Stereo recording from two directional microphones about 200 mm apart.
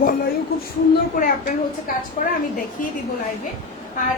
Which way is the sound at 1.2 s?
45° left (ahead or behind).